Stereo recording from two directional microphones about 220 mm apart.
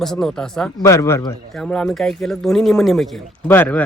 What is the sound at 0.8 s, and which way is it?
Speech, 15° left (ahead or behind).